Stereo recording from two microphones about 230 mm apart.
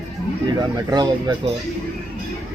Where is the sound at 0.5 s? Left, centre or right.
Centre.